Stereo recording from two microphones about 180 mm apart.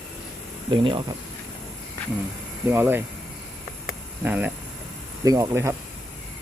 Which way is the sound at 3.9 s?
10° right (ahead or behind).